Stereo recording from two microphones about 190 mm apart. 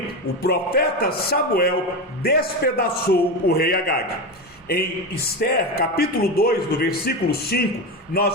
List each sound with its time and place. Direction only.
0.4 s speech: 55° left (ahead or behind)